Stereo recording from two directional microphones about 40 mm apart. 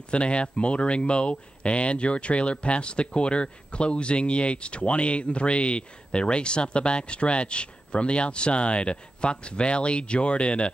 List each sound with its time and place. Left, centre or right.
0.1 s speech: left